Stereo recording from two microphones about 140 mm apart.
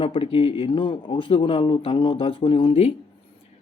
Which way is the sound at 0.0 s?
40° left (ahead or behind).